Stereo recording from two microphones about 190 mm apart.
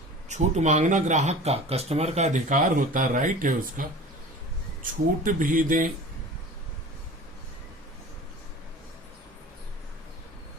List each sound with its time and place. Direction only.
0.3 s speech: 40° right (ahead or behind)